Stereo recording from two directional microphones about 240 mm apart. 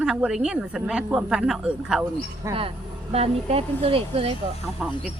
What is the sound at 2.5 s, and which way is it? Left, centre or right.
Speech, right.